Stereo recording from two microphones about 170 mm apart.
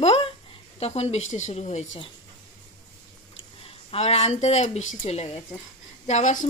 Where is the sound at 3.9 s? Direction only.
40° left (ahead or behind).